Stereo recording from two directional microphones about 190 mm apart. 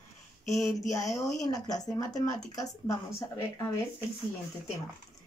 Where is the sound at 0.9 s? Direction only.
15° left (ahead or behind).